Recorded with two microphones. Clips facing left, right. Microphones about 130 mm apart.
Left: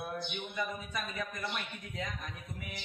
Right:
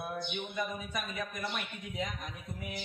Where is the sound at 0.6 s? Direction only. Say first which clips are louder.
Even; 15° right (ahead or behind).